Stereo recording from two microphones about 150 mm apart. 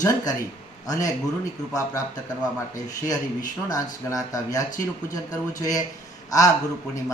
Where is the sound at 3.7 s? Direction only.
25° left (ahead or behind).